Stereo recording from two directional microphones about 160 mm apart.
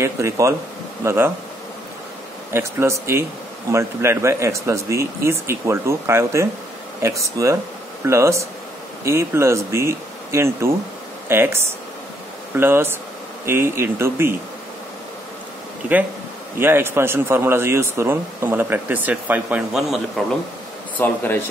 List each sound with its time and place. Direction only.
0.0 s speech: 20° right (ahead or behind)
2.5 s speech: 15° right (ahead or behind)
16.5 s speech: 15° right (ahead or behind)
21.0 s speech: 10° left (ahead or behind)